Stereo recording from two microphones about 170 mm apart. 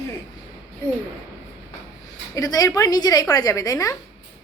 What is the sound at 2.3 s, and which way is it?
A woman's voice, 20° left (ahead or behind).